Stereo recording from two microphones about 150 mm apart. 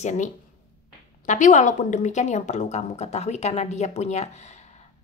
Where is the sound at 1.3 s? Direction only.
55° left (ahead or behind).